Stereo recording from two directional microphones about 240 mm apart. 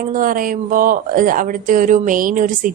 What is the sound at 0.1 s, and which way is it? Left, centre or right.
Speech, right.